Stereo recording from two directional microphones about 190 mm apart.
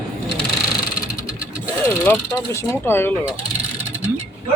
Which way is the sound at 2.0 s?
15° left (ahead or behind).